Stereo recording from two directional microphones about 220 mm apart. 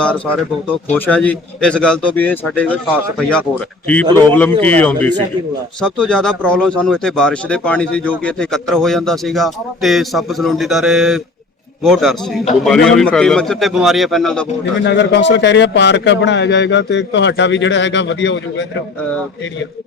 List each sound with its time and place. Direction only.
0.9 s speech: 10° left (ahead or behind)
14.8 s a man's voice: 50° left (ahead or behind)